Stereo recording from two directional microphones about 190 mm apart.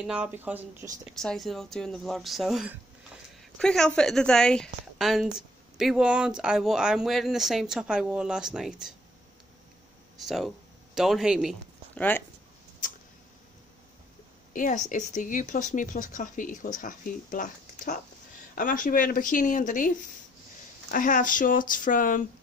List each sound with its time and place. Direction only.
0.0 s speech: 5° right (ahead or behind)
1.1 s speech: centre (ahead or behind)
10.2 s speech: centre (ahead or behind)
11.9 s a sound: 10° left (ahead or behind)
14.5 s speech: 40° left (ahead or behind)